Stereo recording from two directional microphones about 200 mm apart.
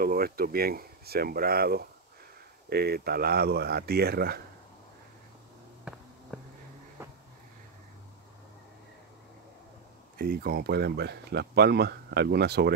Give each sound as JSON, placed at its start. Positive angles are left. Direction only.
{"t": 0.0, "sound": "speech", "side_deg": -45}
{"t": 6.3, "sound": "a sound", "side_deg": 5}
{"t": 10.1, "sound": "speech", "side_deg": -45}